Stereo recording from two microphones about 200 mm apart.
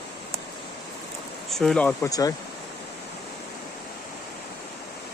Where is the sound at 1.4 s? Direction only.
Centre (ahead or behind).